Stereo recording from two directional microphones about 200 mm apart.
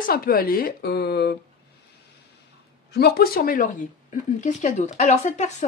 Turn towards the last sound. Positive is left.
turn(degrees=35)  # may be behind; listen again after turning